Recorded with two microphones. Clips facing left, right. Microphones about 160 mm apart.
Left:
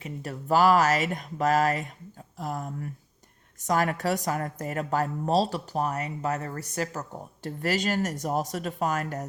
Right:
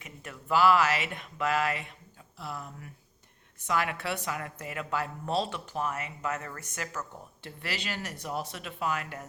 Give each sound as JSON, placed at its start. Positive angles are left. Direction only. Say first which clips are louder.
{"t": 0.0, "sound": "speech", "louder": "left 9 dB", "side_deg": 35}